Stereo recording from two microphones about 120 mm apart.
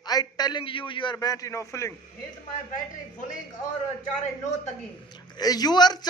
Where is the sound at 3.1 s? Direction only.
90° left.